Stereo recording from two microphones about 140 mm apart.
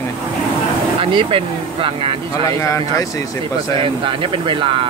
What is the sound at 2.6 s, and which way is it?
Speech, 20° left (ahead or behind).